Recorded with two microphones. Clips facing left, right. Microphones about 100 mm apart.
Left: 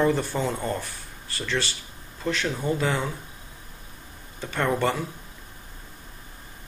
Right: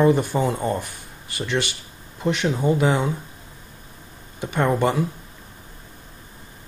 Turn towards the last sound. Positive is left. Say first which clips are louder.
# right 4 dB
turn(degrees=-15)  # may be behind; listen again after turning